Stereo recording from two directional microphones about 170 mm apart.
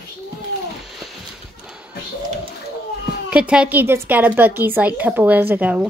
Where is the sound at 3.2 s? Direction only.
5° right (ahead or behind).